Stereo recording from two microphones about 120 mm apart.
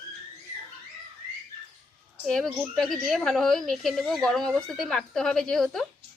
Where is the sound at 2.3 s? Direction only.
5° left (ahead or behind).